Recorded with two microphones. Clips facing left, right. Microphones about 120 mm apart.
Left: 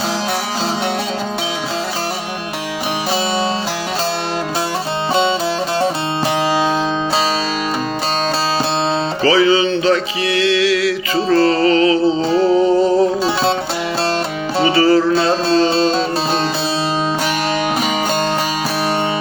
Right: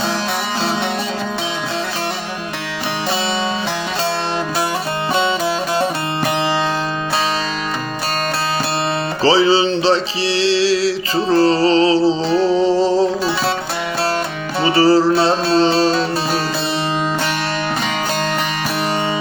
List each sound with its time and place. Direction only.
9.2 s music: 30° right (ahead or behind)
14.8 s music: 30° right (ahead or behind)
15.7 s music: 25° left (ahead or behind)